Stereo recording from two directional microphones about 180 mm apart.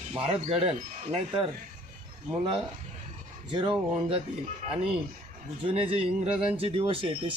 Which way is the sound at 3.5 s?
30° right (ahead or behind).